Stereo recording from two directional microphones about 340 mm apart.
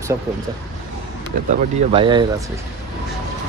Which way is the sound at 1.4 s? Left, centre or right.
Centre.